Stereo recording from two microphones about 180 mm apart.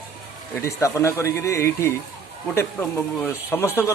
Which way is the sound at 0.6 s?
15° left (ahead or behind).